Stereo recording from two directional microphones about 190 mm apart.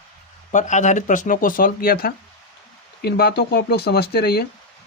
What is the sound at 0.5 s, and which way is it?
Speech, 40° left (ahead or behind).